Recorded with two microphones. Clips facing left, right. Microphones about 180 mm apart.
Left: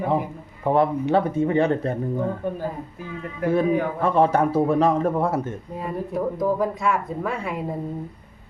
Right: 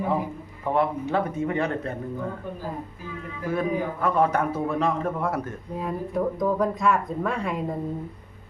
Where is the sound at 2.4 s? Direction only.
60° left (ahead or behind).